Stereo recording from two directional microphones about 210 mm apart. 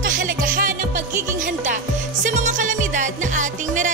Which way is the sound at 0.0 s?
40° right (ahead or behind).